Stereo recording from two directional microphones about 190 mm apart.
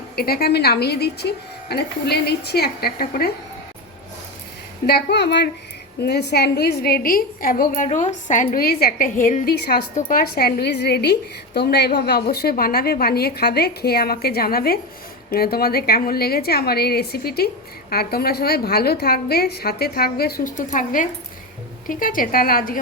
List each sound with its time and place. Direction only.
0.2 s a woman's voice: 55° left (ahead or behind)
4.9 s a woman's voice: 60° left (ahead or behind)